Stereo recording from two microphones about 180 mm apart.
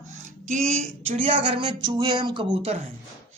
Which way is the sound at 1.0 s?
35° right (ahead or behind).